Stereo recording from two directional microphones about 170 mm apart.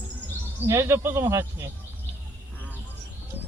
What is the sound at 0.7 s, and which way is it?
Speech, 15° right (ahead or behind).